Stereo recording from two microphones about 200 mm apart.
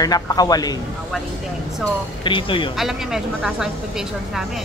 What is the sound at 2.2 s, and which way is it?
Speech, 25° left (ahead or behind).